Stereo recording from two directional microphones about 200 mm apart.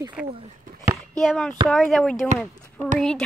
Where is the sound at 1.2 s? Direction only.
Centre (ahead or behind).